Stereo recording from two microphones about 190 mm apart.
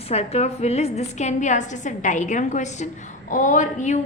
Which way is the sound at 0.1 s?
35° left (ahead or behind).